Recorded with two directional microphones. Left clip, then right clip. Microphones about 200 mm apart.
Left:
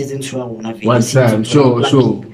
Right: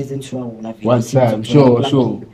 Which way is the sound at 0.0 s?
50° right (ahead or behind).